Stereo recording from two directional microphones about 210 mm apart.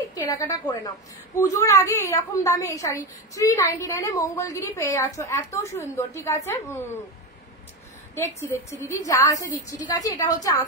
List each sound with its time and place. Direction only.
0.1 s a woman's voice: 15° left (ahead or behind)
8.1 s a woman's voice: 15° left (ahead or behind)